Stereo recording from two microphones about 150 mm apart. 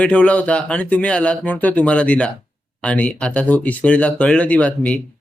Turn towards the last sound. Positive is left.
turn(degrees=10)  # may be behind; listen again after turning